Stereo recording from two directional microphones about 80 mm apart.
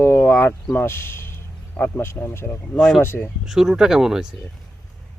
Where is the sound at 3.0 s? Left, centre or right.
Left.